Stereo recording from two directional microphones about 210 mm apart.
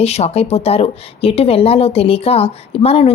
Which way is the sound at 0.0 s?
30° left (ahead or behind).